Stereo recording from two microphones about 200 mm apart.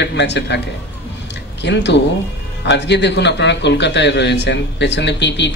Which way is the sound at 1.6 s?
60° left (ahead or behind).